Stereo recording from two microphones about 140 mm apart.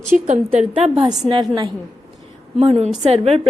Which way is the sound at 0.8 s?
50° right (ahead or behind).